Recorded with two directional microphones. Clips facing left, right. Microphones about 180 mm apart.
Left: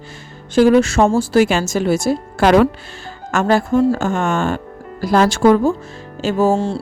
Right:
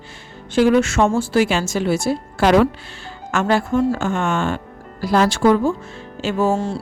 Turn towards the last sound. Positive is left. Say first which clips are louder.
# left 3 dB
turn(degrees=30)  # may be behind; listen again after turning